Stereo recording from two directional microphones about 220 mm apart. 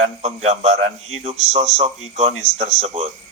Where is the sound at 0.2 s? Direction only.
30° right (ahead or behind).